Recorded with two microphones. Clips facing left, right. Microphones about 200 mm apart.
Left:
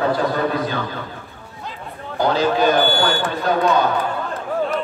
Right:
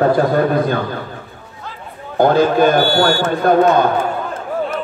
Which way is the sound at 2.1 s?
50° right (ahead or behind).